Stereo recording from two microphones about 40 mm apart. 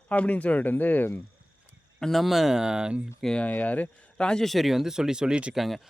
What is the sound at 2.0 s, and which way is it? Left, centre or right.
Speech, centre.